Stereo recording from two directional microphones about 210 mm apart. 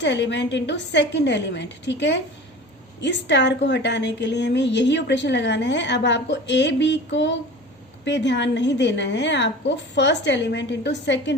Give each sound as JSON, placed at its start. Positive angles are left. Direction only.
{"t": 0.0, "sound": "a woman's voice", "side_deg": 55}